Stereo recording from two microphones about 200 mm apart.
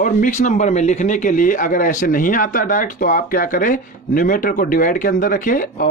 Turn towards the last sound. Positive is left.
turn(degrees=45)  # may be behind; listen again after turning